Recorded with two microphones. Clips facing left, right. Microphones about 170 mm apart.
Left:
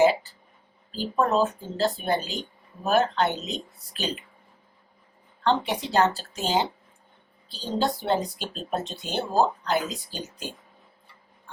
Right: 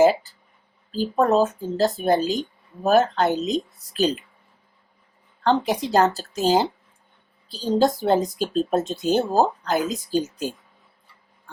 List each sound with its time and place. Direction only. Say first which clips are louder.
0.0 s speech: right 3 dB; 40° right (ahead or behind)
5.4 s speech: right 4 dB; 40° right (ahead or behind)